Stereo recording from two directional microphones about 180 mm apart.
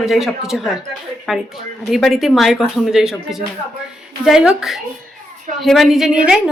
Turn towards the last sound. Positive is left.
turn(degrees=-5)  # may be behind; listen again after turning